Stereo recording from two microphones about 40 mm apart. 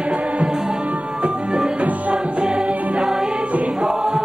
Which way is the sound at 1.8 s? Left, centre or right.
Right.